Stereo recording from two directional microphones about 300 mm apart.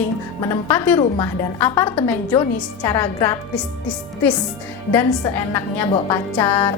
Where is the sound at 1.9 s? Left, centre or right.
Centre.